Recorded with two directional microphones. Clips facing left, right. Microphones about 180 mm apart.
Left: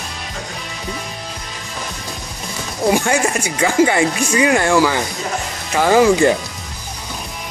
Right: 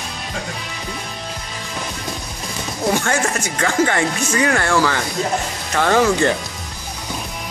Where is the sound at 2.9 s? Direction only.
10° left (ahead or behind).